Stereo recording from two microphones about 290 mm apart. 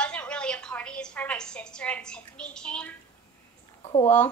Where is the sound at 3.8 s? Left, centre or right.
Centre.